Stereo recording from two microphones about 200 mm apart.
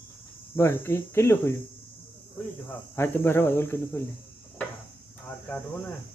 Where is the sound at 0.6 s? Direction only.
10° left (ahead or behind).